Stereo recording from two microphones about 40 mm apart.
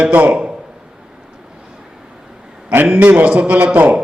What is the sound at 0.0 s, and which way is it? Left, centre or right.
Speech, right.